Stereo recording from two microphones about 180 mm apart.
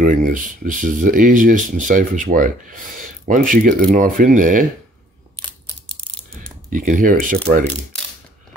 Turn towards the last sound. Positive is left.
turn(degrees=-50)  # may be behind; listen again after turning